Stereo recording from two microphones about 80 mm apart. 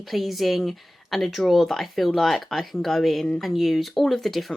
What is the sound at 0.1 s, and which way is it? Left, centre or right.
Speech, centre.